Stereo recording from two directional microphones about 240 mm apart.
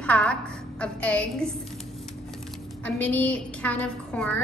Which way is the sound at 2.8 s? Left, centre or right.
Centre.